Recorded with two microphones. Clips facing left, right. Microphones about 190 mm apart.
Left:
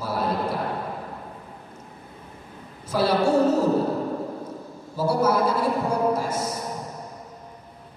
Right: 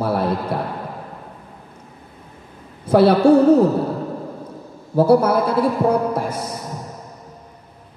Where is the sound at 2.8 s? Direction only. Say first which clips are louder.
Right 10 dB; 60° right (ahead or behind).